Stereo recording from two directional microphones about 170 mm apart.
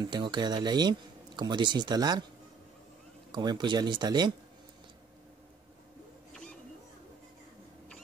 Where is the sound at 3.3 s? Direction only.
25° right (ahead or behind).